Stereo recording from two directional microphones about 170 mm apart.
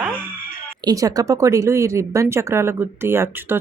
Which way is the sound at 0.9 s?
20° right (ahead or behind).